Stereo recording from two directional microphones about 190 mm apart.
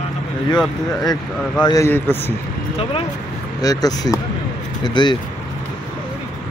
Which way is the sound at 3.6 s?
20° left (ahead or behind).